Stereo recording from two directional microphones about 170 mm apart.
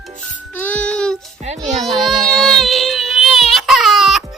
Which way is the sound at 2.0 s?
Centre (ahead or behind).